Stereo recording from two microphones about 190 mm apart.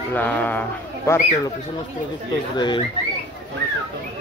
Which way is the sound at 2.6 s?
25° left (ahead or behind).